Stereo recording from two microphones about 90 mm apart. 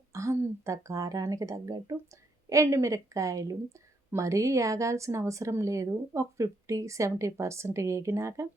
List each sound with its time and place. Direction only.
0.1 s speech: 35° right (ahead or behind)